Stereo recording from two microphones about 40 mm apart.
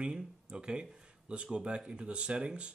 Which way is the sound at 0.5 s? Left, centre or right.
Right.